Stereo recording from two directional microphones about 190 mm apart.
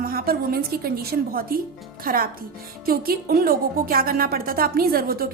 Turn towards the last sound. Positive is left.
turn(degrees=-50)  # may be behind; listen again after turning